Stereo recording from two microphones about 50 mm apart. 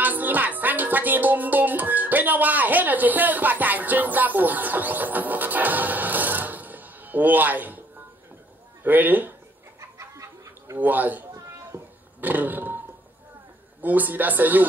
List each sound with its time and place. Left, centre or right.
0.0 s music: right
8.8 s speech: right
9.8 s chicken: right
10.8 s speech: right
11.7 s a sound: right
12.2 s roaring cats: right
13.7 s speech: right